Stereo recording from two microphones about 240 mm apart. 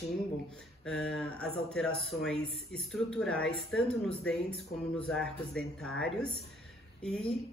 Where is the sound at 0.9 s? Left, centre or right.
Centre.